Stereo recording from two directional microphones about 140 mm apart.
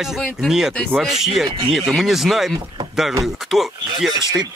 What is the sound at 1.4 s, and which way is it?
Speech, 35° right (ahead or behind).